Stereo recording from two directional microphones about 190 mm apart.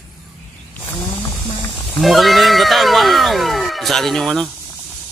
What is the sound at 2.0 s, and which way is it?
Speech, centre (ahead or behind).